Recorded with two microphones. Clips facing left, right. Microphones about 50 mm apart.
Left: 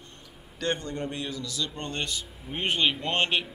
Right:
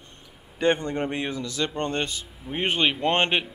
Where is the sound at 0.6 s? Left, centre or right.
Right.